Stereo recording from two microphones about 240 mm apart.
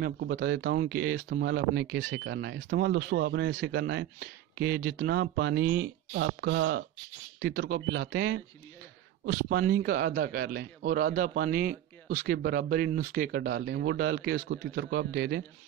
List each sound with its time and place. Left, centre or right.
0.0 s a man's voice: right